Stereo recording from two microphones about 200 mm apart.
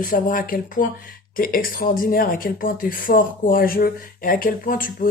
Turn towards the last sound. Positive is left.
turn(degrees=45)  # may be behind; listen again after turning